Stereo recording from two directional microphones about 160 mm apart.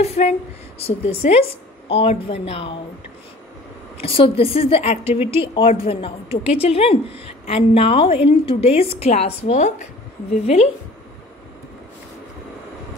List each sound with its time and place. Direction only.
0.0 s speech: 45° left (ahead or behind)
4.0 s speech: 35° left (ahead or behind)